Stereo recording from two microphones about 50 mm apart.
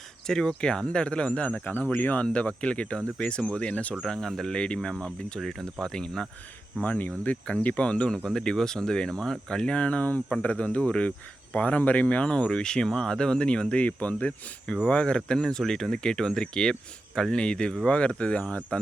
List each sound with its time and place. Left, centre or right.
0.3 s speech: centre; by 2.1 s left
2.2 s speech: left
3.7 s speech: left
4.0 s speech: centre
5.4 s speech: centre
6.8 s speech: left